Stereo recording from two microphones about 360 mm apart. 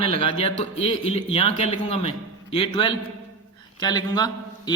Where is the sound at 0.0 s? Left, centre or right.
Centre.